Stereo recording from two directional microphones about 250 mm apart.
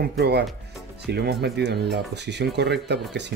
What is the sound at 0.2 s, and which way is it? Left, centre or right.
Speech, right.